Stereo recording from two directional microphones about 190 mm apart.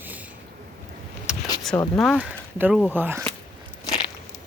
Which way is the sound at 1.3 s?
5° right (ahead or behind).